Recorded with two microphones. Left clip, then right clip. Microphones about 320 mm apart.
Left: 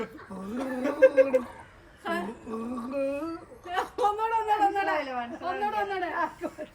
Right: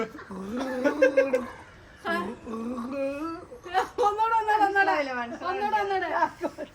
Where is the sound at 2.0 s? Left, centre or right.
Centre.